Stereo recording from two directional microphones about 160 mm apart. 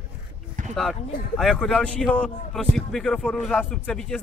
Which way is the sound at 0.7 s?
Centre (ahead or behind).